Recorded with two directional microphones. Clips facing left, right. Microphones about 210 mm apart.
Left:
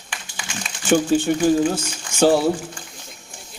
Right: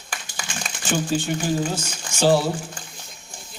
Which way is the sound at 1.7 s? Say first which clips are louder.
Left 3 dB; 55° left (ahead or behind).